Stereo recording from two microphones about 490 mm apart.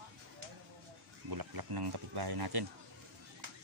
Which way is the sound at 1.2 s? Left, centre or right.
Right.